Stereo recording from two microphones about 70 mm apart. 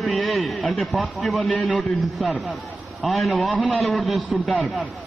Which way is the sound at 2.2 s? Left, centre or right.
Centre.